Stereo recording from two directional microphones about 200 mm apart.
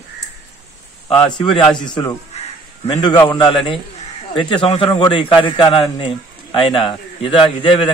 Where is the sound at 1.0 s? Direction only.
25° left (ahead or behind).